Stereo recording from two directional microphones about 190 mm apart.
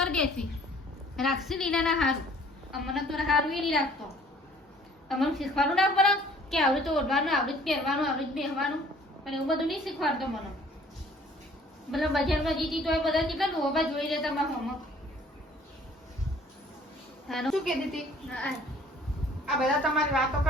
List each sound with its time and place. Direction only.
0.0 s a sound: 5° left (ahead or behind)
1.1 s a woman's voice: centre (ahead or behind)
5.0 s a woman's voice: centre (ahead or behind)
11.9 s a woman's voice: centre (ahead or behind)
17.2 s a woman's voice: centre (ahead or behind)